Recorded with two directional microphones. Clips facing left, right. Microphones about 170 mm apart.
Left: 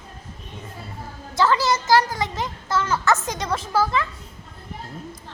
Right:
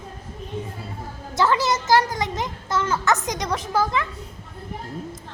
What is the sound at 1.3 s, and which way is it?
A child's voice, 20° right (ahead or behind).